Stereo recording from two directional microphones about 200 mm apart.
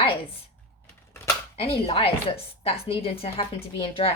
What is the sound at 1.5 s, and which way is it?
A woman's voice, 30° left (ahead or behind).